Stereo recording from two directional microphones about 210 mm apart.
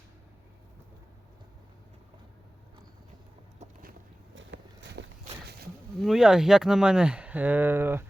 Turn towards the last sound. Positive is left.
turn(degrees=-10)  # may be behind; listen again after turning